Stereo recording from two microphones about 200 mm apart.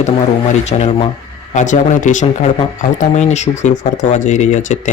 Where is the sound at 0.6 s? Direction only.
30° left (ahead or behind).